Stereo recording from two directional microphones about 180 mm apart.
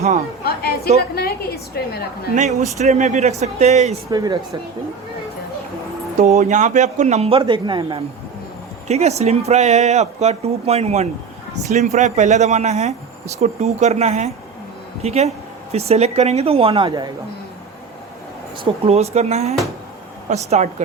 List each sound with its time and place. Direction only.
0.4 s a woman's voice: 60° left (ahead or behind)
2.3 s speech: 40° right (ahead or behind)
4.1 s speech: 20° right (ahead or behind)
6.1 s speech: 40° right (ahead or behind)
8.9 s speech: 35° right (ahead or behind)
18.6 s speech: 35° right (ahead or behind)